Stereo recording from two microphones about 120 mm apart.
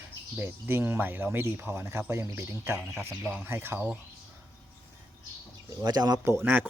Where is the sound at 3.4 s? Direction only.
20° right (ahead or behind).